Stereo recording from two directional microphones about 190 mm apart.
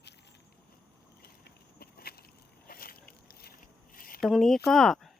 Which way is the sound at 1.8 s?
55° left (ahead or behind).